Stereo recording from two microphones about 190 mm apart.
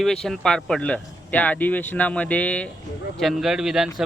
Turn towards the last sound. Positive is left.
turn(degrees=0)  # may be behind; listen again after turning